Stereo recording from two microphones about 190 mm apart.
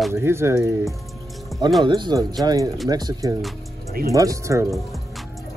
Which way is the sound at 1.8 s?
25° right (ahead or behind).